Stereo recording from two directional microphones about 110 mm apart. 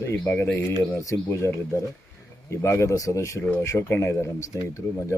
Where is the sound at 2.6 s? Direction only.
25° left (ahead or behind).